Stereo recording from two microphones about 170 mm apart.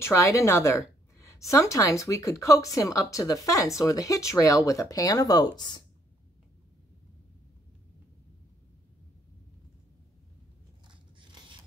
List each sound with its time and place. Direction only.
0.0 s a woman's voice: 15° left (ahead or behind)